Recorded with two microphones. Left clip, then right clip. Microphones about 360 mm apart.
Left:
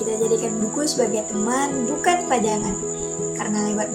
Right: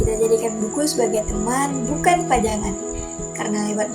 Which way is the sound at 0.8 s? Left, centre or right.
Right.